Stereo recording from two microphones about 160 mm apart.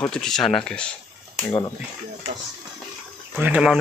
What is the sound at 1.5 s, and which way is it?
Speech, 20° left (ahead or behind).